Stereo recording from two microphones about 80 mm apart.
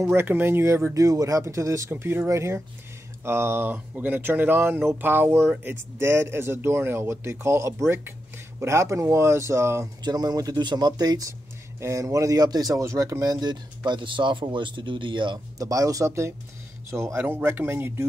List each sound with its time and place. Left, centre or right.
0.0 s speech: right
1.0 s speech: right
1.9 s speech: right
10.0 s a man's voice: right
11.8 s a man's voice: right
15.6 s speech: right
17.2 s speech: right